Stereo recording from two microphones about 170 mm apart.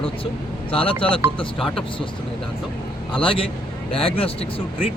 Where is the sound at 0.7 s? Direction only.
30° left (ahead or behind).